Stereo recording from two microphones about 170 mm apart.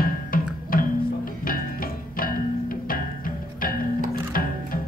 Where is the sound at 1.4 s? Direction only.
55° left (ahead or behind).